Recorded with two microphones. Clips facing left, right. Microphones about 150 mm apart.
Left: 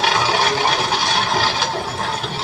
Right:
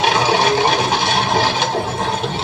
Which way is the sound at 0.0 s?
20° right (ahead or behind).